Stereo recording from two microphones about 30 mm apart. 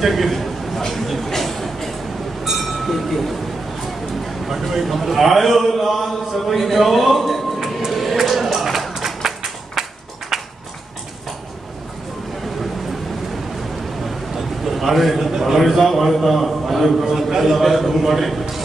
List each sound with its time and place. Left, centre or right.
0.0 s a man's voice: centre
1.3 s a sound: centre
2.8 s a man's voice: centre
4.5 s a man's voice: centre
7.9 s music: centre
8.9 s a sound: centre
14.3 s a sound: centre
15.3 s a man's voice: centre
15.6 s a man's voice: centre
17.0 s a man's voice: centre